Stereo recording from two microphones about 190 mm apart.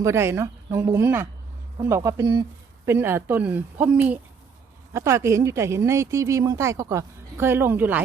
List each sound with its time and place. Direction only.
0.0 s a woman's voice: 15° right (ahead or behind)